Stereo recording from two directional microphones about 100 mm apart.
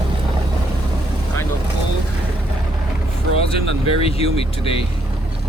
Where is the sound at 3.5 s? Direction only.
75° left (ahead or behind).